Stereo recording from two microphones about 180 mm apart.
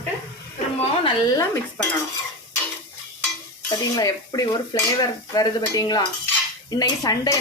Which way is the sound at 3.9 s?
20° left (ahead or behind).